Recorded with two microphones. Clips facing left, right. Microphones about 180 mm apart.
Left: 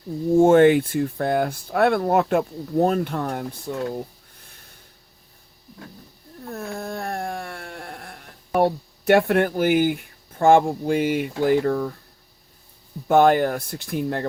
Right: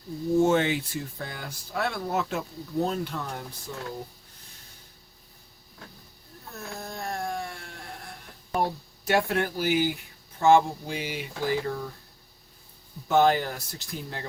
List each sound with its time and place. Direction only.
0.3 s speech: 50° left (ahead or behind)
6.5 s a sound: 55° left (ahead or behind)
13.1 s speech: 55° left (ahead or behind)